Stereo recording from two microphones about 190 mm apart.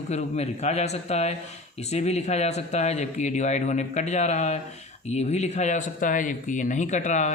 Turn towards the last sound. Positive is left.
turn(degrees=40)  # may be behind; listen again after turning